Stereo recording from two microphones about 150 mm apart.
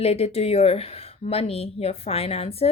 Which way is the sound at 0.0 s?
40° left (ahead or behind).